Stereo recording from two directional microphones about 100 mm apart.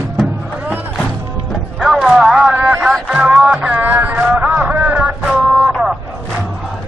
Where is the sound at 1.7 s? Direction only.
5° right (ahead or behind).